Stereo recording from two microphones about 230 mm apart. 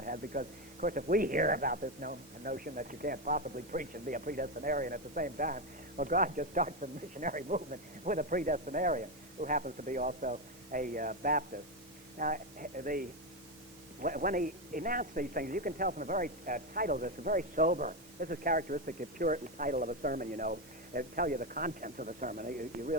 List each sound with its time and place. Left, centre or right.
0.0 s speech: right